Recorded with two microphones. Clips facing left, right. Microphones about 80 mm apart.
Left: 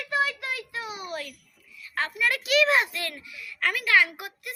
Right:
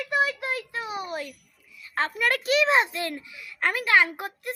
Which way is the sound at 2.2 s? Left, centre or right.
Right.